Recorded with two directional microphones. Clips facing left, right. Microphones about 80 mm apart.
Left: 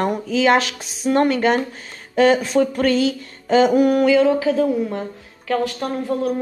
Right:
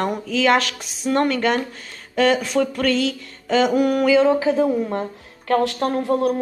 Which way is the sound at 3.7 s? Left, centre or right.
Centre.